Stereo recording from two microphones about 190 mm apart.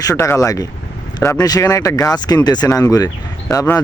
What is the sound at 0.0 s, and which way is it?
A man's voice, 15° left (ahead or behind).